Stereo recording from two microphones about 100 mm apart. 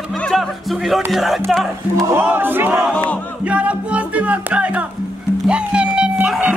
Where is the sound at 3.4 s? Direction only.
15° right (ahead or behind).